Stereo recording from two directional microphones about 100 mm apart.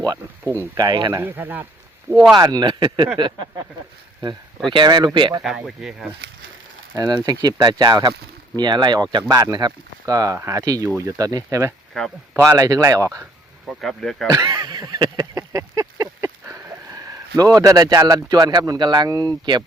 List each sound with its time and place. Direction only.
0.8 s speech: 45° right (ahead or behind)
1.1 s speech: 20° right (ahead or behind)
2.3 s speech: 40° right (ahead or behind)
4.7 s speech: 50° right (ahead or behind)
5.4 s speech: 5° right (ahead or behind)
6.9 s speech: 40° right (ahead or behind)
11.9 s speech: 10° left (ahead or behind)
12.4 s speech: 30° right (ahead or behind)
13.7 s speech: 5° left (ahead or behind)
14.3 s speech: 40° right (ahead or behind)